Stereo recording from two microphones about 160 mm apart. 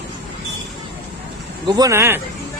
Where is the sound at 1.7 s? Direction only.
20° right (ahead or behind).